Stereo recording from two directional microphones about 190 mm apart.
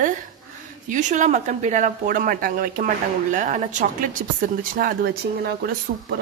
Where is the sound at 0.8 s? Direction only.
40° right (ahead or behind).